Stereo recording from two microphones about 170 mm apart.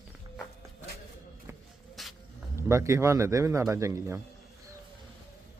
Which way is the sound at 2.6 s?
15° right (ahead or behind).